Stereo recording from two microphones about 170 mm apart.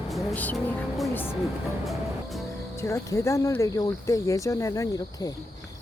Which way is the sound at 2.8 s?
15° left (ahead or behind).